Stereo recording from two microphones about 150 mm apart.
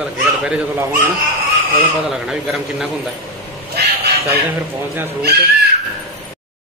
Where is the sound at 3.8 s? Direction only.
90° right.